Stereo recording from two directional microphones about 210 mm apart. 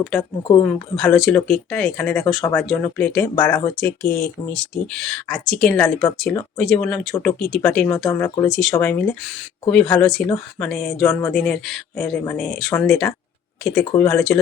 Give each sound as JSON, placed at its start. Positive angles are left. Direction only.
{"t": 0.0, "sound": "speech", "side_deg": 0}